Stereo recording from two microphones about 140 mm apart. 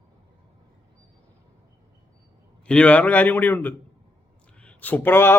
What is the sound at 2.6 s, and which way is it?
A man's voice, 10° left (ahead or behind).